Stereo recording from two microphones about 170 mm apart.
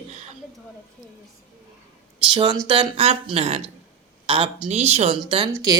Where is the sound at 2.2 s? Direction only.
30° right (ahead or behind).